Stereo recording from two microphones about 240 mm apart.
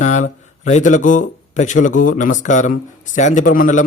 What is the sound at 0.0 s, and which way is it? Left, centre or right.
A man's voice, left.